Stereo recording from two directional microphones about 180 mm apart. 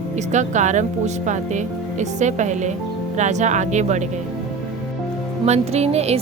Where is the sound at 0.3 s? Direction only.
40° right (ahead or behind).